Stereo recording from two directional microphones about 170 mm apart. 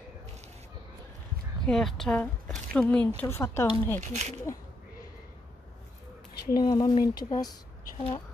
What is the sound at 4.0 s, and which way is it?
Speech, 40° right (ahead or behind).